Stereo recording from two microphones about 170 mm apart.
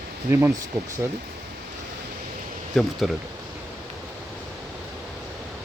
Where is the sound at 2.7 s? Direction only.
Centre (ahead or behind).